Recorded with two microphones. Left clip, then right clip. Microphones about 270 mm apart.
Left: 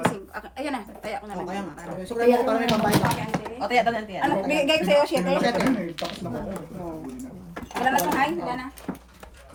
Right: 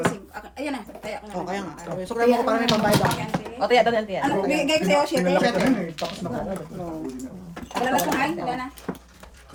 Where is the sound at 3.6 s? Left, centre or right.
Right.